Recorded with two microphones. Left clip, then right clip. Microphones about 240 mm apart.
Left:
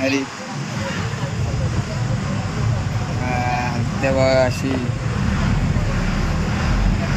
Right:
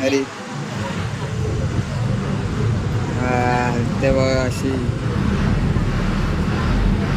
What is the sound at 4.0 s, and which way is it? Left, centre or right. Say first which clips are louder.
Speech: left 3 dB; centre.